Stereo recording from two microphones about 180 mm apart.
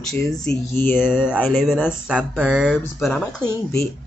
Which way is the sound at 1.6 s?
5° right (ahead or behind).